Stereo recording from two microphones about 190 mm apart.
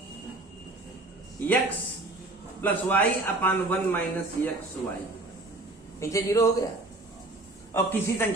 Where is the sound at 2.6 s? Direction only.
10° left (ahead or behind).